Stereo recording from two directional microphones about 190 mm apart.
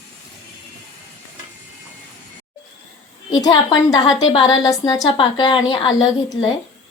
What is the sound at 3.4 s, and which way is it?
A woman's voice, 20° left (ahead or behind).